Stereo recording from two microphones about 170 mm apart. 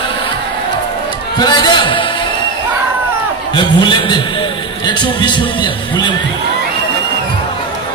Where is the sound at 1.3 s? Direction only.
25° left (ahead or behind).